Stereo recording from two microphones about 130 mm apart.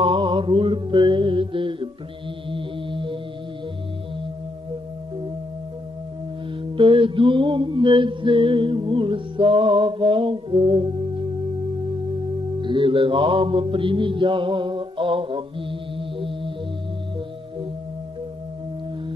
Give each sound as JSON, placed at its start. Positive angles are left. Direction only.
{"t": 0.0, "sound": "mantra", "side_deg": -40}
{"t": 2.5, "sound": "music", "side_deg": -40}
{"t": 6.6, "sound": "mantra", "side_deg": -40}